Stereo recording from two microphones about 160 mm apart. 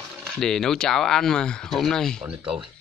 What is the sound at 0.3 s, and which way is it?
Speech, 5° left (ahead or behind).